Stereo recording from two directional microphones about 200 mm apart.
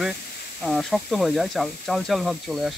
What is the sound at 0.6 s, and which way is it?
Speech, centre (ahead or behind).